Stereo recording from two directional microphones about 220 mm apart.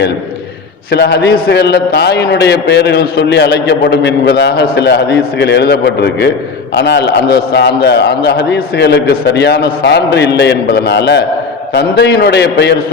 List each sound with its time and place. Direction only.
0.9 s a man's voice: 50° left (ahead or behind)